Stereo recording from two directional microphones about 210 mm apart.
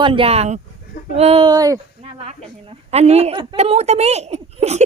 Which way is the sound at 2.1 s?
30° right (ahead or behind).